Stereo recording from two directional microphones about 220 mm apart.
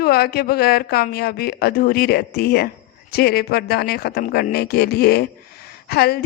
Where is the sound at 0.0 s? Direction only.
45° left (ahead or behind).